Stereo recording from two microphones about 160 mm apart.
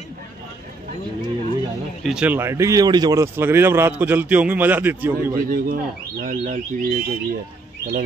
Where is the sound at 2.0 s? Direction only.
5° right (ahead or behind).